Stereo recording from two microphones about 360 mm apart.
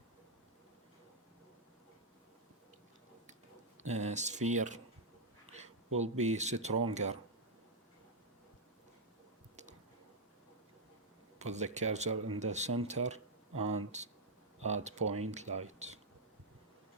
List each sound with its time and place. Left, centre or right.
3.8 s speech: centre
6.0 s speech: centre
11.3 s speech: centre